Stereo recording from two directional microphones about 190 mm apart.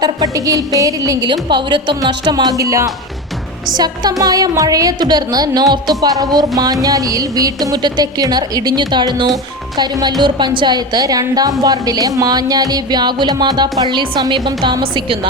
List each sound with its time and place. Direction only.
0.0 s speech: 20° right (ahead or behind)